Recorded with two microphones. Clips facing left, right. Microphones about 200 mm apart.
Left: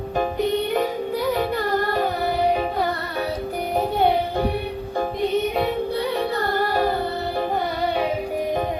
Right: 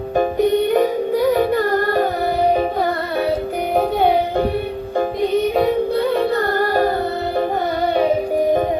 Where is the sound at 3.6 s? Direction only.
60° right (ahead or behind).